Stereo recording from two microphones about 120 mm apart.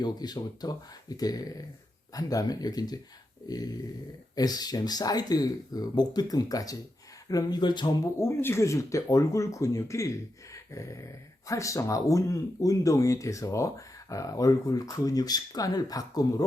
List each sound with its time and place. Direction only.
0.0 s speech: 35° left (ahead or behind)
8.2 s speech: 20° left (ahead or behind)